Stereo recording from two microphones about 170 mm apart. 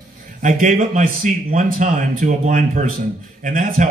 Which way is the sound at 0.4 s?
50° right (ahead or behind).